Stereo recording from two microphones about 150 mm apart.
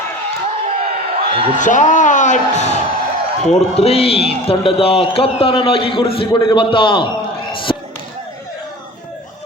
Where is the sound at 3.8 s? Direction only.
40° left (ahead or behind).